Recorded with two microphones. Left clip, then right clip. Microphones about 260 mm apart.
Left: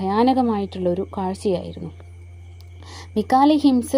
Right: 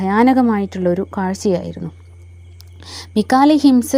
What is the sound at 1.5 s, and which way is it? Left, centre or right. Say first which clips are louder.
Speech: right 5 dB; right.